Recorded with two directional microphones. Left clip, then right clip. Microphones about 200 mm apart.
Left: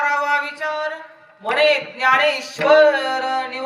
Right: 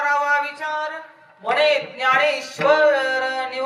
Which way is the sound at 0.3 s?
10° right (ahead or behind).